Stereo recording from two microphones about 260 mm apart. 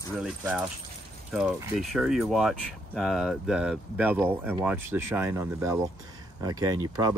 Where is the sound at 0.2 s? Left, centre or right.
Centre.